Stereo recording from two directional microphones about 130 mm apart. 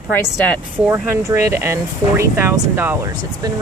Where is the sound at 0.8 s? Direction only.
15° right (ahead or behind).